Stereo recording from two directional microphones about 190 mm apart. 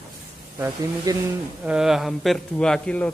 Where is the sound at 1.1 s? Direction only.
20° right (ahead or behind).